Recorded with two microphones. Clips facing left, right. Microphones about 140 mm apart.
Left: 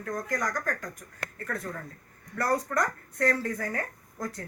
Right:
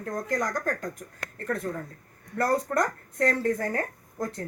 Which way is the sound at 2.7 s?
20° right (ahead or behind).